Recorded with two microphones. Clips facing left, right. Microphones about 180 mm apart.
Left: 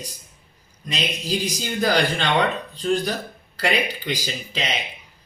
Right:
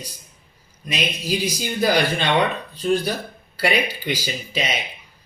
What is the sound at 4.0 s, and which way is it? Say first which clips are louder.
Speech: right 2 dB; 10° right (ahead or behind).